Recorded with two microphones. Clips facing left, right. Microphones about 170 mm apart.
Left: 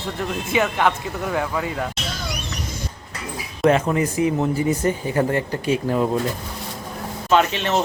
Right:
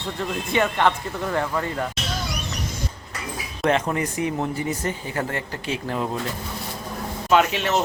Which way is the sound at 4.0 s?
25° left (ahead or behind).